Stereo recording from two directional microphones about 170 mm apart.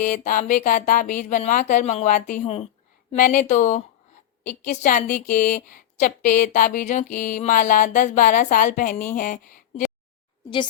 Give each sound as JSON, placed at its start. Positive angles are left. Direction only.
{"t": 0.0, "sound": "speech", "side_deg": 50}